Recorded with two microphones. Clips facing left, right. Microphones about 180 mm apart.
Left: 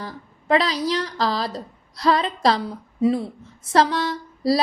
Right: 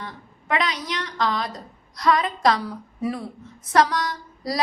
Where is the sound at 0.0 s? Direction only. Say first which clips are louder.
Left 3 dB; 35° left (ahead or behind).